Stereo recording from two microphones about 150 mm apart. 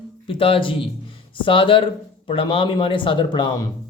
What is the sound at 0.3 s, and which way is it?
A man's voice, 35° left (ahead or behind).